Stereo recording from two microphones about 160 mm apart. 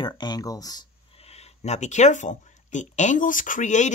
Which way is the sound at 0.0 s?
25° left (ahead or behind).